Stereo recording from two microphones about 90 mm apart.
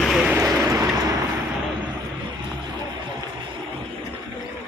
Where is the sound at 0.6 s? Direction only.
35° right (ahead or behind).